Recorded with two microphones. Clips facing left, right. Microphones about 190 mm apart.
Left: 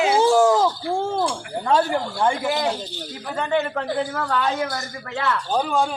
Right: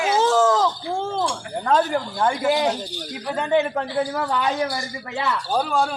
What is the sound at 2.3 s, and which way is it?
Speech, 10° right (ahead or behind).